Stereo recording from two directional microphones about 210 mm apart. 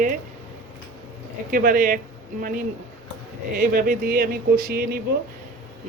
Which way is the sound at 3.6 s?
45° right (ahead or behind).